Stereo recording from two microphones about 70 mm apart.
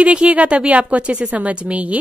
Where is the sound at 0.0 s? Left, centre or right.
Centre.